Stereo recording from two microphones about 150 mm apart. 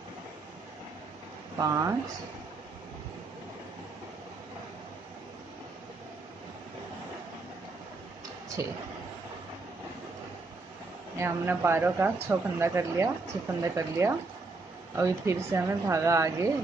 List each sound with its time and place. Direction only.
1.6 s speech: 20° right (ahead or behind)
8.6 s speech: 20° right (ahead or behind)
11.1 s speech: 15° right (ahead or behind)